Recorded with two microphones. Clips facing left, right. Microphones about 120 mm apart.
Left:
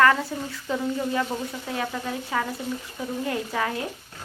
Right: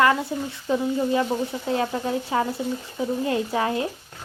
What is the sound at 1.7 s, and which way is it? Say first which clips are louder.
Speech: right 6 dB; 30° right (ahead or behind).